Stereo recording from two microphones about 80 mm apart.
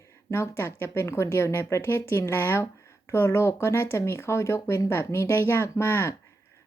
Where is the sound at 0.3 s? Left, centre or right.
Left.